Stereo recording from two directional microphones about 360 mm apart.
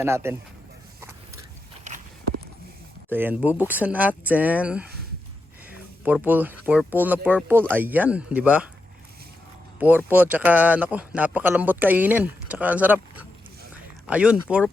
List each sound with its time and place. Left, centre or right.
0.0 s speech: centre
1.9 s walk: centre
3.1 s speech: centre
6.1 s speech: centre
9.8 s speech: centre